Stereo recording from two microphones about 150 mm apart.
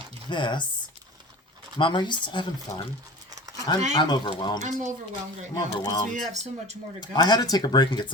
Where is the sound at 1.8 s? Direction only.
30° left (ahead or behind).